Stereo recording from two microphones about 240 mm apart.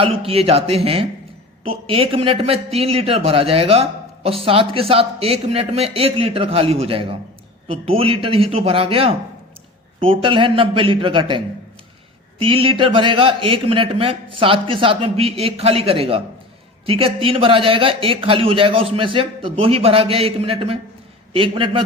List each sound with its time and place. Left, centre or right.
0.0 s a man's voice: right